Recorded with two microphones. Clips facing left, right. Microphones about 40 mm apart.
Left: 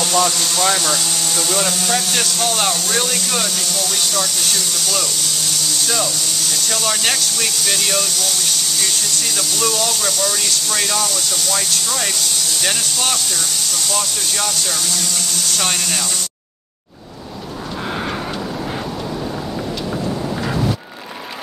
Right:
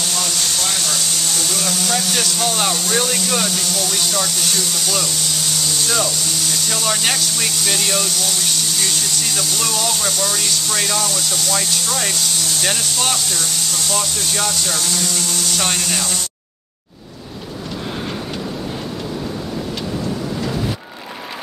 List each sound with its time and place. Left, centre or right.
0.7 s speech: left
1.3 s speech: centre
5.9 s speech: centre
14.9 s speech: centre